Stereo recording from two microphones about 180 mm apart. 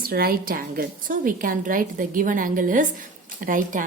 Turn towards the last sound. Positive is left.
turn(degrees=-45)  # may be behind; listen again after turning